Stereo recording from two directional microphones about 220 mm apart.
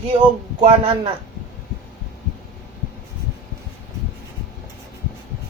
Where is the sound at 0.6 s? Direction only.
20° right (ahead or behind).